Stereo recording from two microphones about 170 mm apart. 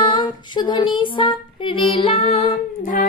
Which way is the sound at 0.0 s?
30° left (ahead or behind).